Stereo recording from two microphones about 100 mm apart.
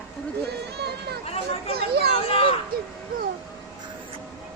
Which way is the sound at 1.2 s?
90° left.